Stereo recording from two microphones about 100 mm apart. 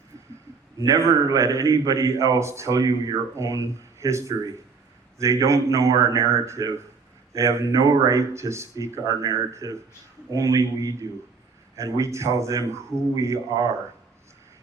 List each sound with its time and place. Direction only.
0.8 s a man's voice: 30° right (ahead or behind)